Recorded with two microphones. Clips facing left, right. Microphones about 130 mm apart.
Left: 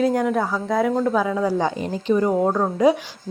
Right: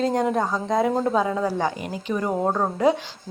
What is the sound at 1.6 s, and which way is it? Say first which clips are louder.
Speech: left 4 dB; 30° left (ahead or behind).